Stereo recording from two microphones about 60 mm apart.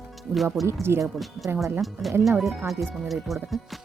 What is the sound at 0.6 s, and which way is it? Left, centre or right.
Speech, right.